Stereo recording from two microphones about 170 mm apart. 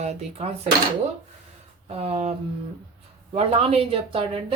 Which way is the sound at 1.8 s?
35° right (ahead or behind).